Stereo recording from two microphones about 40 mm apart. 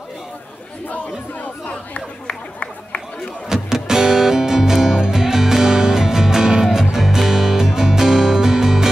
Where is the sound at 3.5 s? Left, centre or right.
Centre.